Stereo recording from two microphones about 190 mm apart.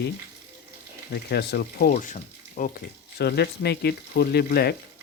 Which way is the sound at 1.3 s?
60° left (ahead or behind).